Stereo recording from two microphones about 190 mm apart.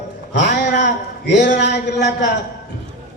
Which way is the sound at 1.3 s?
65° left (ahead or behind).